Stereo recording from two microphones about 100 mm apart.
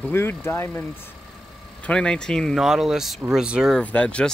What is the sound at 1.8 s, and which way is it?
Speech, 10° left (ahead or behind).